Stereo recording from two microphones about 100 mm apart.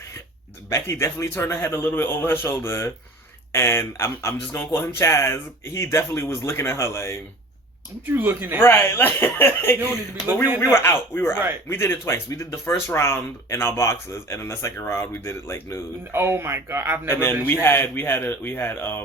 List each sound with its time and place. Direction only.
0.7 s speech: 25° left (ahead or behind)
8.0 s speech: 20° right (ahead or behind)
8.6 s speech: 25° left (ahead or behind)
16.1 s speech: 25° right (ahead or behind)
17.1 s speech: 25° left (ahead or behind)